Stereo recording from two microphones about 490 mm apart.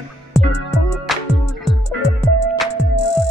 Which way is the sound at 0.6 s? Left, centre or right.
Left.